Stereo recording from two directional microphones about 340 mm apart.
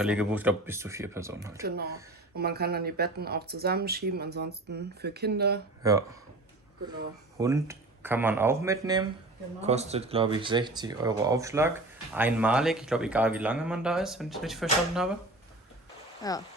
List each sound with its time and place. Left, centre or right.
0.0 s speech: centre
1.6 s speech: right
5.8 s speech: centre
7.3 s a man's voice: centre
16.2 s speech: centre